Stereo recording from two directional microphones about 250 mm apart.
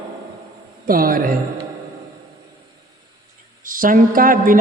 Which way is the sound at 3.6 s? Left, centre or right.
Right.